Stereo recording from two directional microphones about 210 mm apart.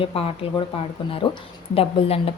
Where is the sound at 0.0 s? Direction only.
25° left (ahead or behind).